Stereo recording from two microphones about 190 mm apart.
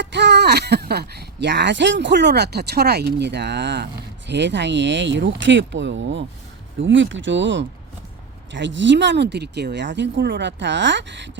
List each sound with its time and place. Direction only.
0.0 s speech: 65° right (ahead or behind)